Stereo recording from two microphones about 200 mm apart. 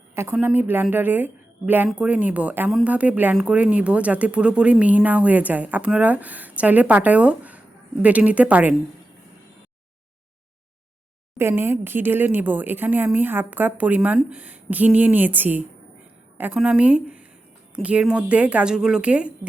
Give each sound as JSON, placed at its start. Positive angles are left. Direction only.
{"t": 0.1, "sound": "speech", "side_deg": -10}
{"t": 11.3, "sound": "speech", "side_deg": -10}